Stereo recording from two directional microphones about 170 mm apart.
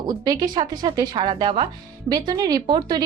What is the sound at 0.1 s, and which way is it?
A woman's voice, 25° right (ahead or behind).